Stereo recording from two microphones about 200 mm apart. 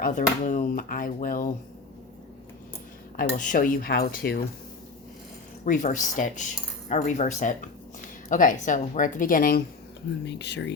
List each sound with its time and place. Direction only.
0.0 s speech: 40° left (ahead or behind)
3.2 s speech: 40° left (ahead or behind)
5.6 s speech: 40° left (ahead or behind)
10.2 s speech: 60° left (ahead or behind)